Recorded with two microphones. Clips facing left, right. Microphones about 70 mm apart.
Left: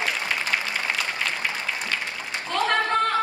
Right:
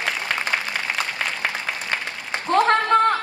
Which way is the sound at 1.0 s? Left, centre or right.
Right.